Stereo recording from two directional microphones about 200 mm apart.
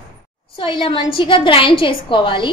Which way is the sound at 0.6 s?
25° left (ahead or behind).